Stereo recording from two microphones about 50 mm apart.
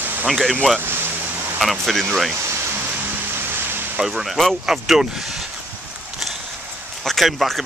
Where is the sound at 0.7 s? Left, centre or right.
Right.